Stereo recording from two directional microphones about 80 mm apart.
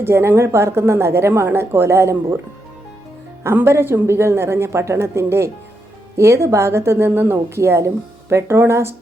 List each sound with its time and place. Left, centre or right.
0.0 s speech: right
3.4 s speech: right